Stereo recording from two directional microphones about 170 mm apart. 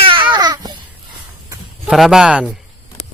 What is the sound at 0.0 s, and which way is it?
Babbling, 30° right (ahead or behind).